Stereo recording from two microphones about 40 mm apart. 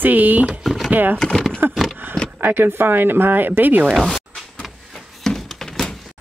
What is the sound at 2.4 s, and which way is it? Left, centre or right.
Speech, right.